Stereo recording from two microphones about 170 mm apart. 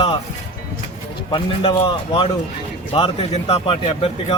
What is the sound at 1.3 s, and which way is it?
Speech, 30° left (ahead or behind).